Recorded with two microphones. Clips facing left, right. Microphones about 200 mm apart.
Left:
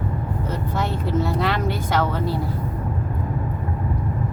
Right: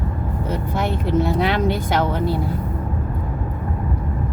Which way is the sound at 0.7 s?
15° right (ahead or behind).